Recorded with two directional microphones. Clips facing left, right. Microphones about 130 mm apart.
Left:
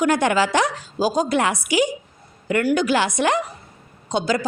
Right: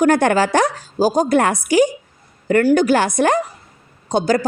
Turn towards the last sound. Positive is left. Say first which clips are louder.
# right 5 dB
turn(degrees=-40)  # may be behind; listen again after turning